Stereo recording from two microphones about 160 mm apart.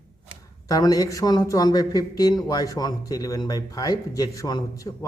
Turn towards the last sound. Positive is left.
turn(degrees=20)  # may be behind; listen again after turning